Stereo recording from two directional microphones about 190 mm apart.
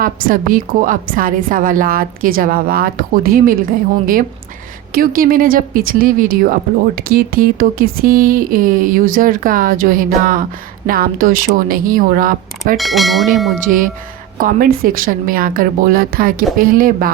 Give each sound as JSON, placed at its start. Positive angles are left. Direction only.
{"t": 0.0, "sound": "speech", "side_deg": -50}
{"t": 4.9, "sound": "speech", "side_deg": -50}
{"t": 12.7, "sound": "bell", "side_deg": 0}
{"t": 13.7, "sound": "speech", "side_deg": -45}